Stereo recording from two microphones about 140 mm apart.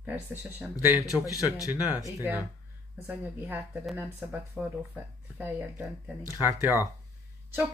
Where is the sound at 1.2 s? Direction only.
25° left (ahead or behind).